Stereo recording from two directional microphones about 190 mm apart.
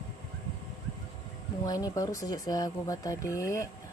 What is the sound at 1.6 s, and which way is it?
Speech, 20° left (ahead or behind).